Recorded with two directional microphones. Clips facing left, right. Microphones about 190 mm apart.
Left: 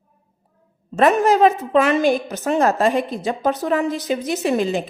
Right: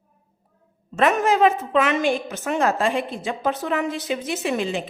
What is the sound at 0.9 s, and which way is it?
A woman's voice, 40° left (ahead or behind).